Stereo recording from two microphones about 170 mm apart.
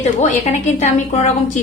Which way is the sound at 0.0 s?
40° left (ahead or behind).